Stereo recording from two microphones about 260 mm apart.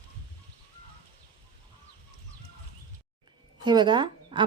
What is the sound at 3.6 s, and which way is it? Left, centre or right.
Speech, centre.